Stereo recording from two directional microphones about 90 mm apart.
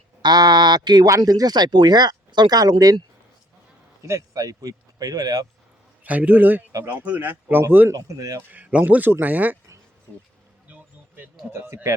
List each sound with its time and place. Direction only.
0.2 s speech: 50° right (ahead or behind)
4.0 s speech: 35° right (ahead or behind)
6.0 s a man's voice: 15° right (ahead or behind)
7.9 s speech: 40° right (ahead or behind)
8.4 s speech: 15° right (ahead or behind)
10.7 s a sound: 20° right (ahead or behind)
11.5 s speech: 30° right (ahead or behind)